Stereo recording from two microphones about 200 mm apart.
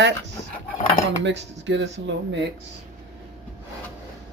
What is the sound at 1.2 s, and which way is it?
Speech, 65° right (ahead or behind).